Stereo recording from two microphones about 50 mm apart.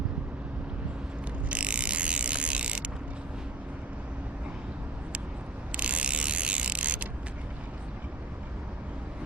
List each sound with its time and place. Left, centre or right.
1.5 s mechanisms: right
5.7 s mechanisms: right